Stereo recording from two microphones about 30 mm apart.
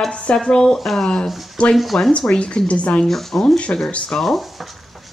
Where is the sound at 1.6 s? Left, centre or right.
Left.